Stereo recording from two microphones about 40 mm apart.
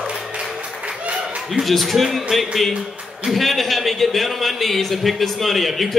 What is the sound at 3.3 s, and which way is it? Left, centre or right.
A man's voice, centre.